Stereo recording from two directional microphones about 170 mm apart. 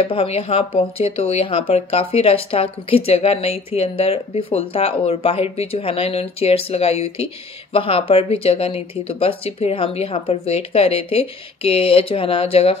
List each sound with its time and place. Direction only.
0.0 s speech: 35° left (ahead or behind)